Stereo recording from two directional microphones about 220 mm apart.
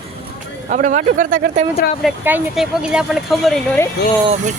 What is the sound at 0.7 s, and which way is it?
Speech, 35° right (ahead or behind).